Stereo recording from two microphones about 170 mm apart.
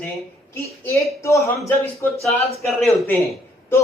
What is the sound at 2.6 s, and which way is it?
Speech, centre (ahead or behind).